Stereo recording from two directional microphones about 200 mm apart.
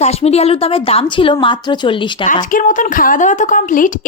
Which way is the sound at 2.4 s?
40° left (ahead or behind).